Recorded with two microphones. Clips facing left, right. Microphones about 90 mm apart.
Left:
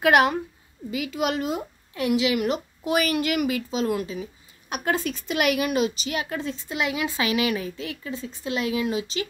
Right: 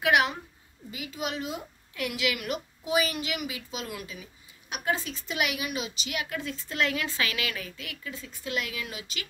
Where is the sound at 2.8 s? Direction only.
60° left (ahead or behind).